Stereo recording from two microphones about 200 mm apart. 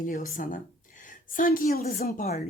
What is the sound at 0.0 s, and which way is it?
A woman's voice, 40° left (ahead or behind).